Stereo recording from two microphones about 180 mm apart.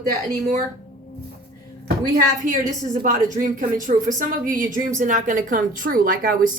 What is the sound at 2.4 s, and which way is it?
A woman's voice, 50° right (ahead or behind).